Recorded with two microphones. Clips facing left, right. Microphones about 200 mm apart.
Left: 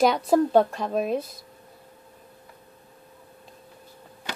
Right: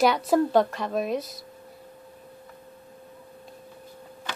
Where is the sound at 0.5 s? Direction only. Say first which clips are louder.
Left 2 dB; 35° left (ahead or behind).